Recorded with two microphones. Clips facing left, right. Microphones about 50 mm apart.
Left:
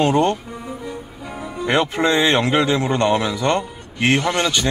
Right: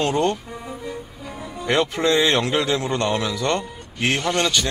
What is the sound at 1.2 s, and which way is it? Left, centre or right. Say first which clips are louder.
Music: left 3 dB; centre.